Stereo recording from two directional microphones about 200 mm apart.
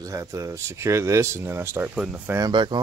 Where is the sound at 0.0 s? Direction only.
15° right (ahead or behind).